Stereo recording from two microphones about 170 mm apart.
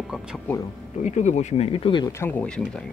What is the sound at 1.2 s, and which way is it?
Speech, 40° left (ahead or behind).